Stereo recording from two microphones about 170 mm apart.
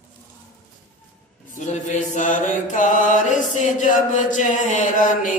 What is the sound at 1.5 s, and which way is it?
Mantra, 45° left (ahead or behind).